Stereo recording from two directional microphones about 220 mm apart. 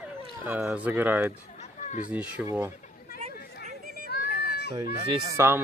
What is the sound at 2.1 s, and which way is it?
Speech, 5° right (ahead or behind).